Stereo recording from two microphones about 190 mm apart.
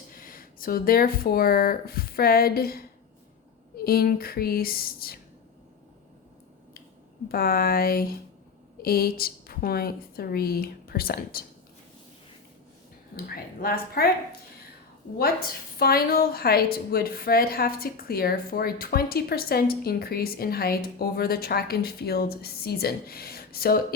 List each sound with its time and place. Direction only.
0.1 s speech: 45° left (ahead or behind)
3.8 s a woman's voice: 50° left (ahead or behind)
7.3 s a woman's voice: 50° left (ahead or behind)
13.1 s a woman's voice: 50° left (ahead or behind)
15.2 s a woman's voice: 50° left (ahead or behind)